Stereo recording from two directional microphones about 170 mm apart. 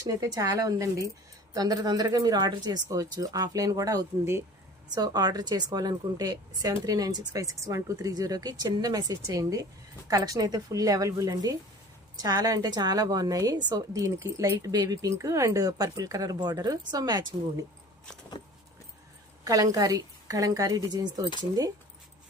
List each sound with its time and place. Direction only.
0.0 s speech: 20° right (ahead or behind)
19.5 s speech: 20° right (ahead or behind)